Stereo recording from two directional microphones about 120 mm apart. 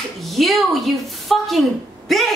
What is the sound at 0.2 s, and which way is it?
A woman's voice, centre (ahead or behind).